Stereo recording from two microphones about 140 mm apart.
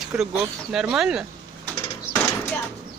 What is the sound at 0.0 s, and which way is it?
Speech, 5° right (ahead or behind).